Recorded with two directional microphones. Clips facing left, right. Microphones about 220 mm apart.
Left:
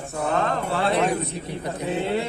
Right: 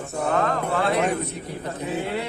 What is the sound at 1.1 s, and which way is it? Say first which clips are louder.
Speech: even; 10° left (ahead or behind).